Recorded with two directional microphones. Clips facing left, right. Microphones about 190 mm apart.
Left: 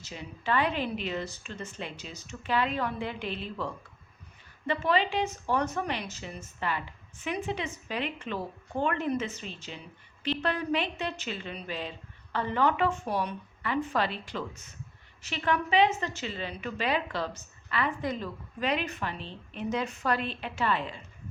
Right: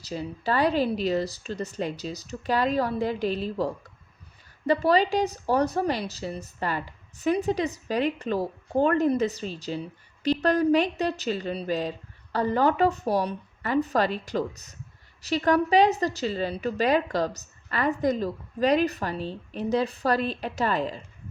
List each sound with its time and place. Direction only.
0.0 s a woman's voice: 35° right (ahead or behind)